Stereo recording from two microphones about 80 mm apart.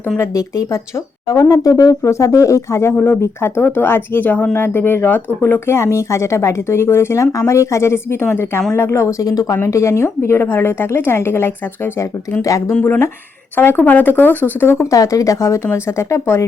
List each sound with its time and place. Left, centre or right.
0.2 s speech: left
9.6 s speech: left
12.4 s speech: left
12.8 s speech: left
14.8 s speech: left